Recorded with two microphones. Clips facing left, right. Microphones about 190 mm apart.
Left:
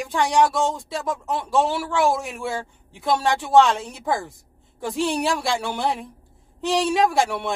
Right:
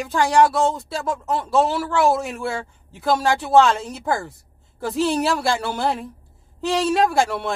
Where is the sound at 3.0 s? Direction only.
Centre (ahead or behind).